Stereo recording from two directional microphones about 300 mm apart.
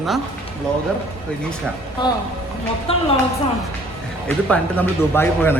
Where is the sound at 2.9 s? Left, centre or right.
Centre.